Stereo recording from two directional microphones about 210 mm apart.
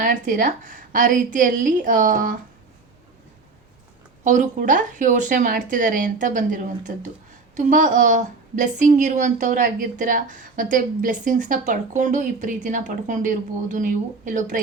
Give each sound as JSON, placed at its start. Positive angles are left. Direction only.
{"t": 0.0, "sound": "a woman's voice", "side_deg": -40}
{"t": 4.2, "sound": "a woman's voice", "side_deg": -35}